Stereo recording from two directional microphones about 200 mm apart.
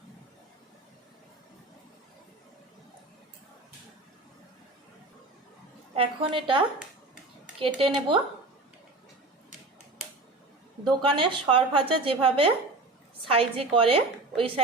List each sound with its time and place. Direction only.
5.9 s a woman's voice: 25° right (ahead or behind)
11.1 s a woman's voice: 25° right (ahead or behind)